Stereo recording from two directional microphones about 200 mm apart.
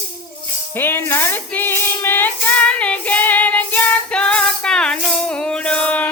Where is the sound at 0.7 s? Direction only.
10° left (ahead or behind).